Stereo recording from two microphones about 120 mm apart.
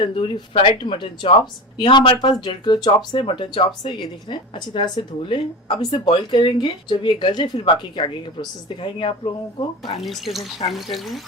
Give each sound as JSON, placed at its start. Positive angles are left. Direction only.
{"t": 0.0, "sound": "speech", "side_deg": 40}
{"t": 10.0, "sound": "speech", "side_deg": 0}
{"t": 10.6, "sound": "speech", "side_deg": 45}
{"t": 10.9, "sound": "speech", "side_deg": 0}